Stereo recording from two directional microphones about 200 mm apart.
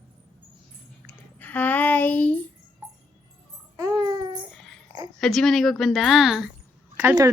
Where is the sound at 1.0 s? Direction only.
10° left (ahead or behind).